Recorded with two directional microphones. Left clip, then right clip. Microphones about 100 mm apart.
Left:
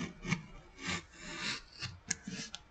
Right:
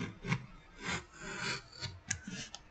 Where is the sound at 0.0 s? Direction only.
10° left (ahead or behind).